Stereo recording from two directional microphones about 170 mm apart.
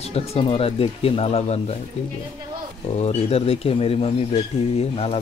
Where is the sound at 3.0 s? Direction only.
40° left (ahead or behind).